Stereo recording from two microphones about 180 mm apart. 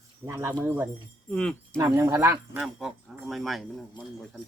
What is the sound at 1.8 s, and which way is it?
Speech, 15° right (ahead or behind).